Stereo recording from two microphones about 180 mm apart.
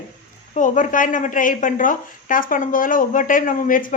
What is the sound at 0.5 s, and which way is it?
A woman's voice, 45° left (ahead or behind).